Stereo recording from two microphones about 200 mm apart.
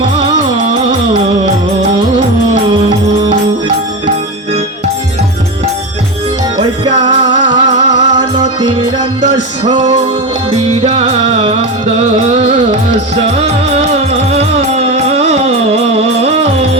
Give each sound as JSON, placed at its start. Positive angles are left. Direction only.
{"t": 6.6, "sound": "music", "side_deg": -20}
{"t": 13.4, "sound": "music", "side_deg": -30}